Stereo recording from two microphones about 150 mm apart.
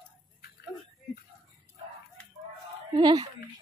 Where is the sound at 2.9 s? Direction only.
30° right (ahead or behind).